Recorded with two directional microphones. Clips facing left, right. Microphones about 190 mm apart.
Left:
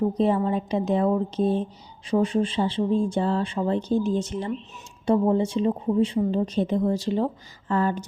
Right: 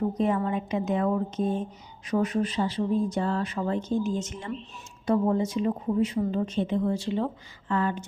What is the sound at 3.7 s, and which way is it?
Speech, 35° left (ahead or behind).